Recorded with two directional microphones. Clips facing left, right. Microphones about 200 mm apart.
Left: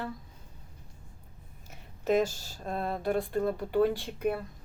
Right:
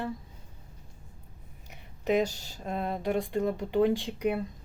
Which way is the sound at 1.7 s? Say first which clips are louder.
Even; 15° right (ahead or behind).